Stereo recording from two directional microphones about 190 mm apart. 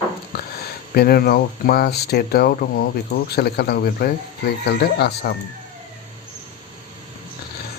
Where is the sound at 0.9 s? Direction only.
55° left (ahead or behind).